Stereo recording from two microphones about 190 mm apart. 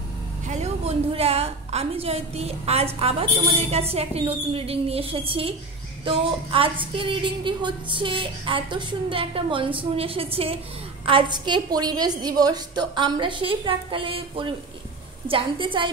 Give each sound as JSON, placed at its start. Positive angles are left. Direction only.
{"t": 0.5, "sound": "a woman's voice", "side_deg": -35}